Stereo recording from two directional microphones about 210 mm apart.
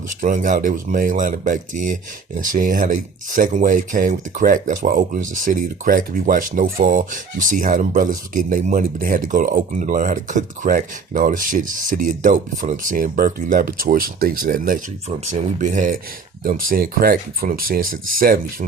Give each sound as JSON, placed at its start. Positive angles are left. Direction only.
{"t": 0.1, "sound": "speech", "side_deg": -40}